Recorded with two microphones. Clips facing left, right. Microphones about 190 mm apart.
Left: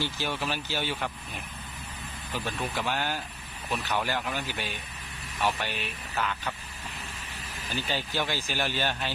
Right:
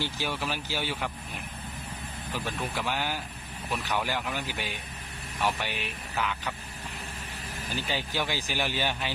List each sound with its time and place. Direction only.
0.0 s speech: 10° right (ahead or behind)
2.3 s speech: 10° right (ahead or behind)
7.8 s speech: 15° right (ahead or behind)